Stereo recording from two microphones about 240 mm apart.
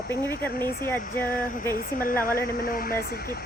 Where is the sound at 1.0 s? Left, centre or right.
Left.